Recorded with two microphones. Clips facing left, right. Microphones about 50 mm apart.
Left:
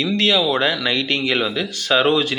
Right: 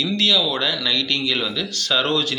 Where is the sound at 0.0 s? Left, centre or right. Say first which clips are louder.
Left 2 dB; left.